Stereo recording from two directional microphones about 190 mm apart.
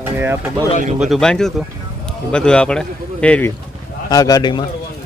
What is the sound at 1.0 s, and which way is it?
Speech, centre (ahead or behind).